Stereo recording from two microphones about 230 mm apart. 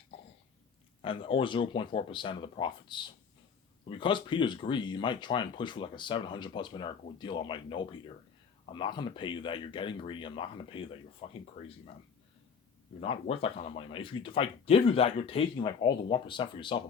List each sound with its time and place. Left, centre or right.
1.0 s speech: left
13.0 s speech: left